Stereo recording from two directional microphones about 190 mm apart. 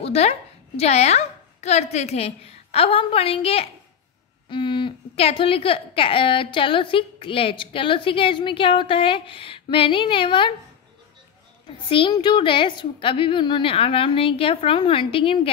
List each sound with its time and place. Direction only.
0.0 s a woman's voice: 30° left (ahead or behind)
11.6 s a woman's voice: 25° left (ahead or behind)